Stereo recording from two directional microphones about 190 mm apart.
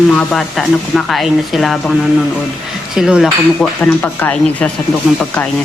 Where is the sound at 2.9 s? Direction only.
5° right (ahead or behind).